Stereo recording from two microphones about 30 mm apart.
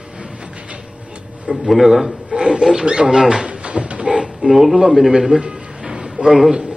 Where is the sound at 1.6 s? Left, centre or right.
Centre.